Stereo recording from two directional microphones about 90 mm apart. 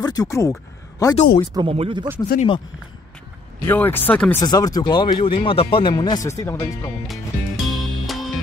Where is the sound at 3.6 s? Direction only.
25° left (ahead or behind).